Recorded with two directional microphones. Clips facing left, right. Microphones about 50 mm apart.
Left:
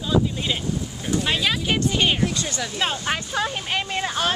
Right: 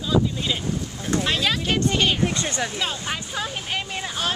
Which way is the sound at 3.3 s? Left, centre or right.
Left.